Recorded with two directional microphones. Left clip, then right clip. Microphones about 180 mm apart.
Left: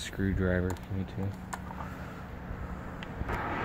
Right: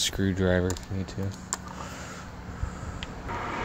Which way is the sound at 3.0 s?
5° right (ahead or behind).